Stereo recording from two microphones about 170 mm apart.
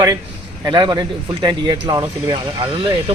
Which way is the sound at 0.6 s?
25° right (ahead or behind).